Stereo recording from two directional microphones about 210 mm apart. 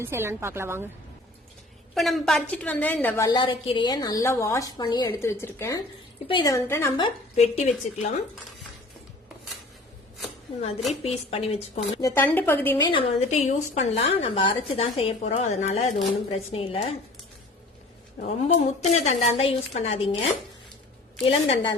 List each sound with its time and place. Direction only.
0.0 s a woman's voice: 10° right (ahead or behind)
2.0 s a woman's voice: centre (ahead or behind)
3.2 s a woman's voice: 20° left (ahead or behind)
7.0 s a woman's voice: 30° left (ahead or behind)
11.0 s a woman's voice: 30° left (ahead or behind)
11.9 s a woman's voice: 15° left (ahead or behind)
12.8 s a woman's voice: 25° left (ahead or behind)
18.2 s a woman's voice: 30° left (ahead or behind)
21.2 s a woman's voice: 30° left (ahead or behind)